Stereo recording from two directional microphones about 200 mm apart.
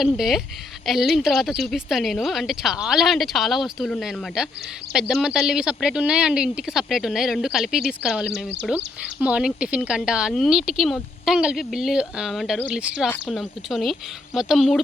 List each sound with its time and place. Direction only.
0.0 s speech: centre (ahead or behind)